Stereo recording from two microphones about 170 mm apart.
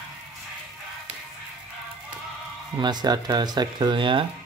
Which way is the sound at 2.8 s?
25° right (ahead or behind).